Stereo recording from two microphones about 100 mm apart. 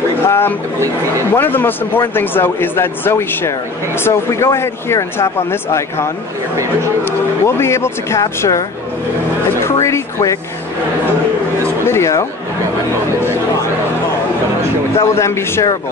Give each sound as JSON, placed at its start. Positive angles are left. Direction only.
{"t": 0.3, "sound": "speech", "side_deg": 20}
{"t": 6.5, "sound": "speech", "side_deg": -30}
{"t": 7.1, "sound": "speech", "side_deg": 25}
{"t": 9.6, "sound": "a sound", "side_deg": 25}
{"t": 11.8, "sound": "speech", "side_deg": 30}
{"t": 15.0, "sound": "speech", "side_deg": 30}